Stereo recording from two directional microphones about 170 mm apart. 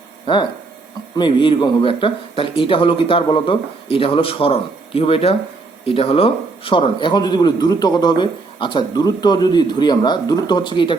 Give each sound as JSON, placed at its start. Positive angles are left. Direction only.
{"t": 1.1, "sound": "a man's voice", "side_deg": 30}